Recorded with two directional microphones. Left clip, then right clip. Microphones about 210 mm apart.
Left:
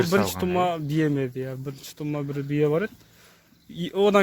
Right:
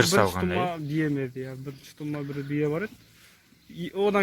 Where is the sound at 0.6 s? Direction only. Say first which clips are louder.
Left 4 dB; 60° left (ahead or behind).